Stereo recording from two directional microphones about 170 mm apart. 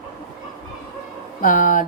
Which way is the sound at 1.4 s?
50° left (ahead or behind).